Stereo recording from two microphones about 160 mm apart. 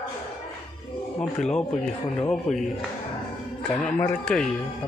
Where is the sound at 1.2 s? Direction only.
5° left (ahead or behind).